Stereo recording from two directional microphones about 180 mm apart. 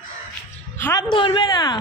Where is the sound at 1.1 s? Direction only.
25° left (ahead or behind).